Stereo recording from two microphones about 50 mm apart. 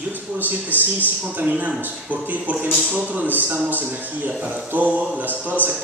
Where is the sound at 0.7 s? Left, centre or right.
Right.